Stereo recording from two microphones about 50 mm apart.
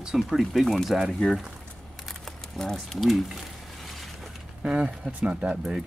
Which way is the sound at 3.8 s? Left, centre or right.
Centre.